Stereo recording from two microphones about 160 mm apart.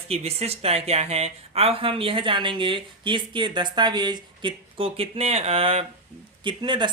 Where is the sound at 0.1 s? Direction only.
40° right (ahead or behind).